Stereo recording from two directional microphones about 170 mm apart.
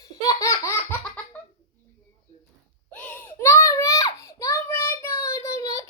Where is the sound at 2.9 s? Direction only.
10° left (ahead or behind).